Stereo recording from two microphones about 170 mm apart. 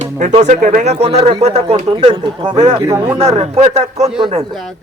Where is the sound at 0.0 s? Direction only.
45° right (ahead or behind).